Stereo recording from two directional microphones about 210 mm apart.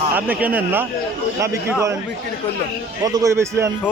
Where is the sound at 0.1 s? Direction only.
10° right (ahead or behind).